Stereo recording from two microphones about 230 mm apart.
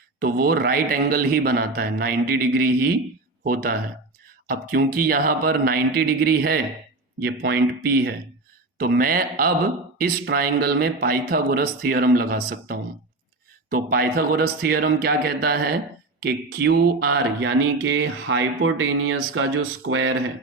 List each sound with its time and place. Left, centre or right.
0.2 s a man's voice: right
16.2 s mantra: right